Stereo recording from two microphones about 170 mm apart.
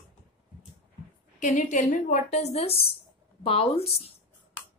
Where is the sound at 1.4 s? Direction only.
45° left (ahead or behind).